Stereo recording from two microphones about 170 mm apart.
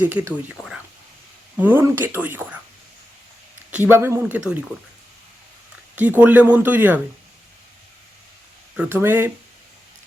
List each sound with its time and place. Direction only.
0.0 s speech: 10° right (ahead or behind)
0.5 s a sound: centre (ahead or behind)
1.5 s speech: 10° right (ahead or behind)
3.7 s speech: 10° right (ahead or behind)
6.0 s speech: 10° right (ahead or behind)
8.7 s speech: 10° right (ahead or behind)